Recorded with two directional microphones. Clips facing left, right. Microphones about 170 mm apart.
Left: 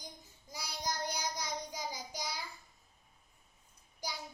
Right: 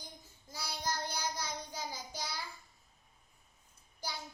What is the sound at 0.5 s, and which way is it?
Child singing, 15° left (ahead or behind).